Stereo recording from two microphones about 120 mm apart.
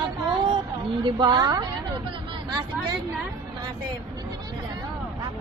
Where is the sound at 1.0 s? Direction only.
35° right (ahead or behind).